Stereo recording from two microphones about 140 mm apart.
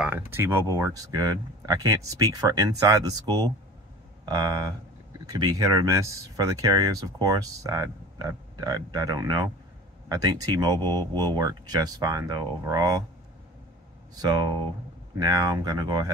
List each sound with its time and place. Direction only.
0.0 s speech: 15° right (ahead or behind)
15.1 s speech: 30° right (ahead or behind)